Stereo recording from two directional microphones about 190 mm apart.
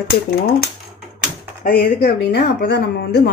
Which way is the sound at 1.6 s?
50° left (ahead or behind).